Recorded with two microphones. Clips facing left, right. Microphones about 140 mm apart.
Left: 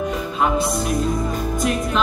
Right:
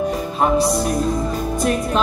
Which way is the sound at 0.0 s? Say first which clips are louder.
Right 2 dB; 35° right (ahead or behind).